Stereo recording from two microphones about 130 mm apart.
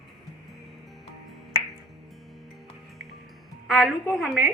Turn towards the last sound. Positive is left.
turn(degrees=-5)  # may be behind; listen again after turning